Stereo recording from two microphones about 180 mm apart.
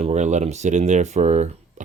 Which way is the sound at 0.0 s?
40° right (ahead or behind).